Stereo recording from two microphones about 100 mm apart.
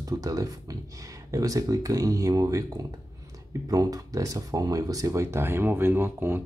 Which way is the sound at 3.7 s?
35° right (ahead or behind).